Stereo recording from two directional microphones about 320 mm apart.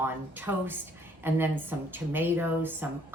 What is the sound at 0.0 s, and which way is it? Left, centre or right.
A woman's voice, centre.